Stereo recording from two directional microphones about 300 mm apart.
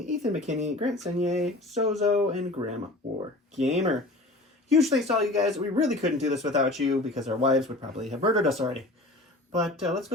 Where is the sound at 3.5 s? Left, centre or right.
Right.